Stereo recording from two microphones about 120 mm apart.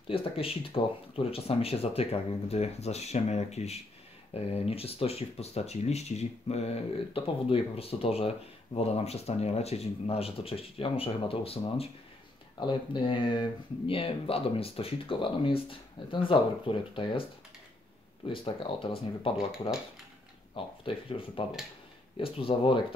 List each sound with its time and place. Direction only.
0.1 s speech: 50° left (ahead or behind)
12.5 s speech: 40° left (ahead or behind)
18.2 s speech: 50° left (ahead or behind)
20.5 s speech: 50° left (ahead or behind)